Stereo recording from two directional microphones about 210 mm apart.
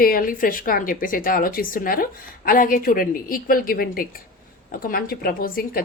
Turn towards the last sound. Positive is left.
turn(degrees=45)  # may be behind; listen again after turning